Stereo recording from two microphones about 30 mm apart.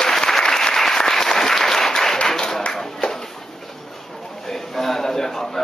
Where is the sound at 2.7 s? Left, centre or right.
Centre.